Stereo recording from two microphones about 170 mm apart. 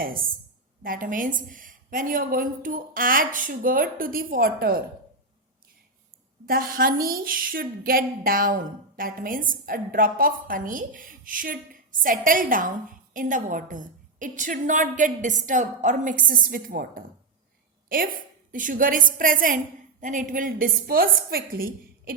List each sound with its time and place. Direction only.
0.8 s a woman's voice: 55° right (ahead or behind)
6.4 s a woman's voice: 60° right (ahead or behind)